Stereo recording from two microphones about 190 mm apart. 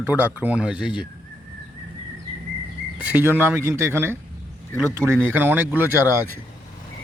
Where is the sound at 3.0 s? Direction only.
10° right (ahead or behind).